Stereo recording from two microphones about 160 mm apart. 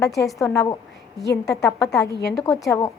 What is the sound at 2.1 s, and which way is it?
Speech, 90° left.